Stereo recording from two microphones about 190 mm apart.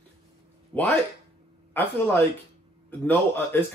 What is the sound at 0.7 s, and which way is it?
Speech, 10° left (ahead or behind).